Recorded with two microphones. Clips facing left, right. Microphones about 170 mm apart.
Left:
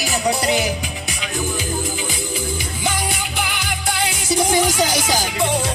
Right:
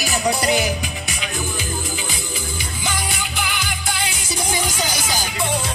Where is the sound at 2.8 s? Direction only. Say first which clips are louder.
Left 2 dB; 55° left (ahead or behind).